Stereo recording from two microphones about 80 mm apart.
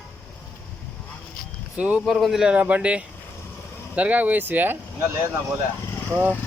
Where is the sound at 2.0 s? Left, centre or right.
Centre.